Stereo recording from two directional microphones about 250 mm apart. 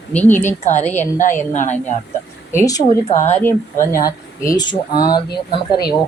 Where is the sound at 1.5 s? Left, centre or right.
Left.